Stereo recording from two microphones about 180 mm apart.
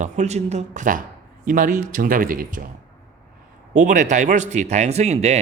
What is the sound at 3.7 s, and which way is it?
Speech, 45° right (ahead or behind).